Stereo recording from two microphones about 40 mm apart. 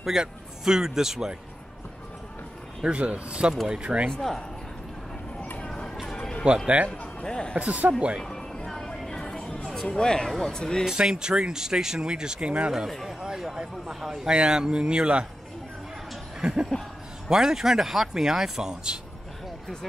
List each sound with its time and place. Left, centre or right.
0.0 s speech: centre
2.9 s speech: right
4.1 s speech: centre
6.4 s speech: right
6.9 s a sound: left
7.5 s speech: right
8.2 s music: centre
8.6 s vehicle: centre
9.8 s speech: centre
10.9 s speech: centre
13.2 s a man's voice: centre
16.3 s a sound: right
17.3 s speech: centre